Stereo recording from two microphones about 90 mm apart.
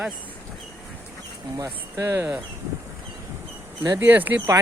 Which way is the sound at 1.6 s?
30° right (ahead or behind).